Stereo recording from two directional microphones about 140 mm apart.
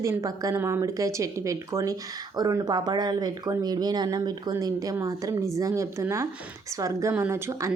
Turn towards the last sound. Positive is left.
turn(degrees=-20)  # may be behind; listen again after turning